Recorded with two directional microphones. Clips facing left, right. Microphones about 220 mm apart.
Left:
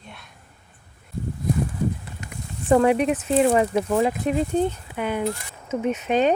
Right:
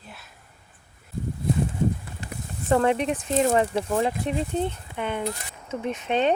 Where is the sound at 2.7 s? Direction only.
10° left (ahead or behind).